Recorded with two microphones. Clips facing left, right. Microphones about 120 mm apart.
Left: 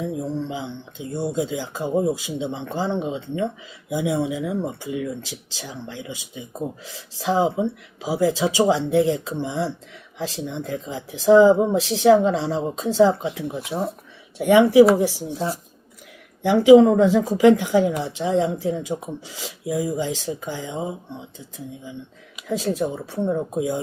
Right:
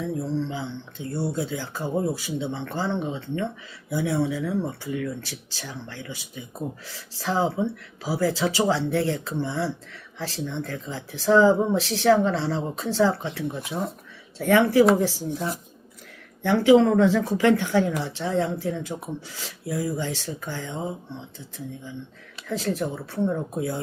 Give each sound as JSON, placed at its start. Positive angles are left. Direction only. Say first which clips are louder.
{"t": 0.0, "sound": "speech", "louder": "left 1 dB", "side_deg": 15}
{"t": 16.4, "sound": "speech", "louder": "left 5 dB", "side_deg": 10}